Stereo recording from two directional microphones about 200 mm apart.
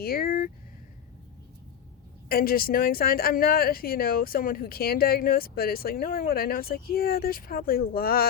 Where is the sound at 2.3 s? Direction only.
50° left (ahead or behind).